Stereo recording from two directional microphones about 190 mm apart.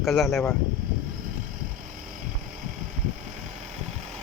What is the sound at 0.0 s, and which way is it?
Speech, centre (ahead or behind).